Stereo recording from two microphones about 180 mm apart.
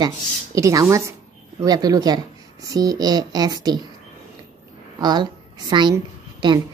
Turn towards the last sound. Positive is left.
turn(degrees=-25)  # may be behind; listen again after turning